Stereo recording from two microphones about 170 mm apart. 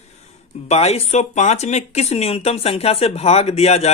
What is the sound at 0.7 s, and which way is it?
Speech, 40° left (ahead or behind).